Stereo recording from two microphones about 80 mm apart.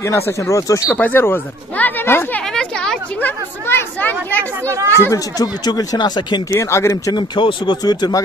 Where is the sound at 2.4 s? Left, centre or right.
Centre.